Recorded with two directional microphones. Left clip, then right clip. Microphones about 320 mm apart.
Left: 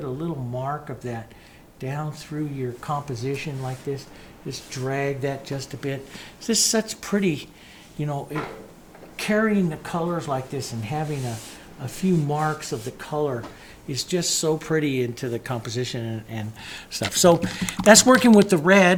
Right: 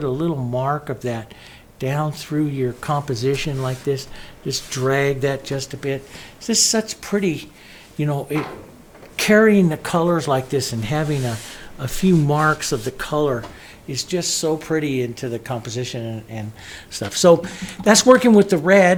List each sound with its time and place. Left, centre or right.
0.0 s speech: right
5.8 s speech: centre
7.9 s speech: right
9.1 s speech: right
13.8 s speech: centre